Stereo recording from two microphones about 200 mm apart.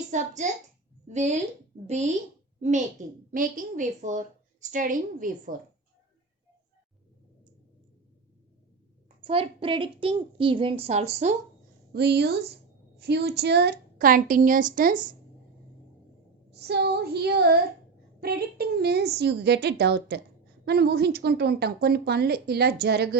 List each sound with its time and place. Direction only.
0.1 s a woman's voice: 40° right (ahead or behind)
2.6 s a woman's voice: 35° right (ahead or behind)
9.0 s a woman's voice: 30° right (ahead or behind)
11.9 s a woman's voice: 55° right (ahead or behind)
16.5 s a woman's voice: 55° right (ahead or behind)